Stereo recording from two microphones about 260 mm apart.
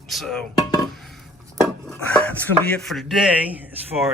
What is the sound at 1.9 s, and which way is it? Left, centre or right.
A man's voice, centre.